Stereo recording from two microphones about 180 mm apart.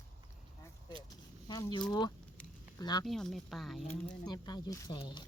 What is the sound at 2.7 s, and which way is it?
Speech, 25° left (ahead or behind).